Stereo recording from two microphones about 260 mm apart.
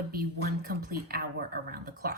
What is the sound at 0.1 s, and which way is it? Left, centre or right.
A woman's voice, right.